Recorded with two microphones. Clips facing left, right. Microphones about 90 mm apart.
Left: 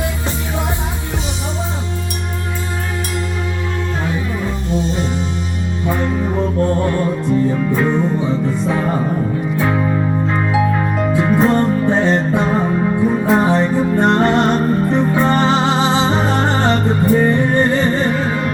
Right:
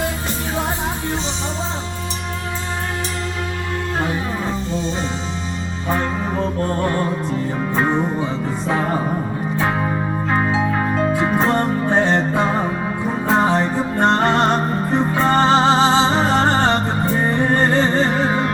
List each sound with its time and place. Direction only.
6.8 s music: 25° right (ahead or behind)